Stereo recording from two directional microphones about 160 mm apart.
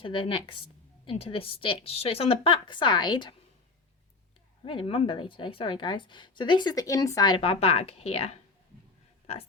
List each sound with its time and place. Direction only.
0.0 s a woman's voice: 30° left (ahead or behind)
4.6 s a woman's voice: 35° left (ahead or behind)